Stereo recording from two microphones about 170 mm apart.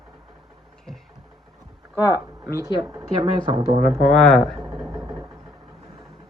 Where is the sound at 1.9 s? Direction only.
10° right (ahead or behind); by 3.8 s 35° right (ahead or behind).